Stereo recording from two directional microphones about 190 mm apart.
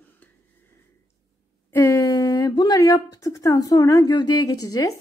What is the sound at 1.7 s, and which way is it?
Speech, 15° left (ahead or behind).